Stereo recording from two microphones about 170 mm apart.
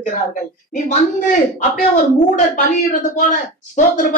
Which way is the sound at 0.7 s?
45° left (ahead or behind).